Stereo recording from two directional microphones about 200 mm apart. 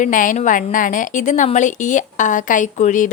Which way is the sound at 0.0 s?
40° left (ahead or behind).